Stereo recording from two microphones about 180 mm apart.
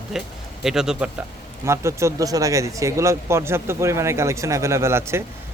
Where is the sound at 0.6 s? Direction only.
5° right (ahead or behind).